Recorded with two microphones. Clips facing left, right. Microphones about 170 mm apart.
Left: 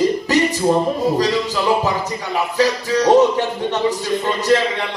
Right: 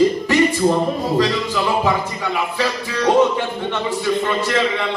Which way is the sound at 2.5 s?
40° left (ahead or behind).